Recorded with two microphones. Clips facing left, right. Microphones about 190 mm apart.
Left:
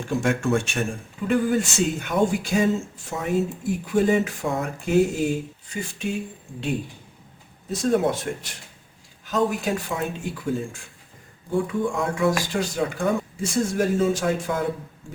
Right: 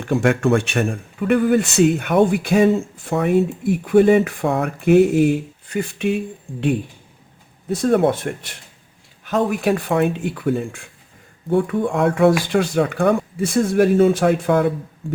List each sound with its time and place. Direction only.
0.0 s speech: 60° right (ahead or behind)
7.7 s speech: 60° right (ahead or behind)